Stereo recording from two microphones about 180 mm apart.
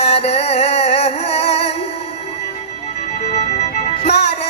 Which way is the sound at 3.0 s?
35° left (ahead or behind).